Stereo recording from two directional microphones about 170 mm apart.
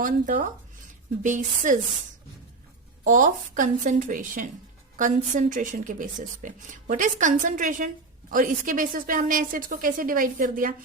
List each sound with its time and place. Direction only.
0.0 s speech: 50° right (ahead or behind)
3.0 s speech: 50° right (ahead or behind)